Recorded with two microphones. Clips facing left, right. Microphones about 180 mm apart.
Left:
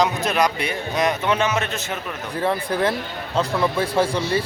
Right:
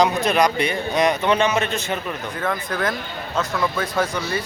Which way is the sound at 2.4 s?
30° left (ahead or behind).